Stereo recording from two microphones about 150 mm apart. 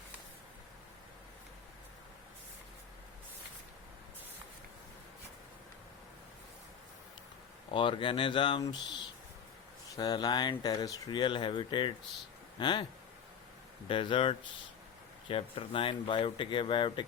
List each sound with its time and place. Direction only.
7.7 s speech: 35° left (ahead or behind)
13.8 s speech: 35° left (ahead or behind)